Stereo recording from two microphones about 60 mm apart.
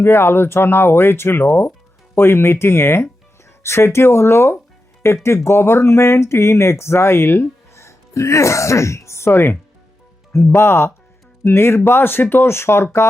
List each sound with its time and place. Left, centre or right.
0.0 s speech: left